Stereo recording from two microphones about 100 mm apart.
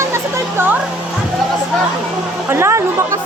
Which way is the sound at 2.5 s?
25° right (ahead or behind).